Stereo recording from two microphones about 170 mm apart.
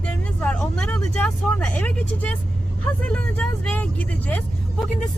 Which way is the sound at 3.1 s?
5° left (ahead or behind).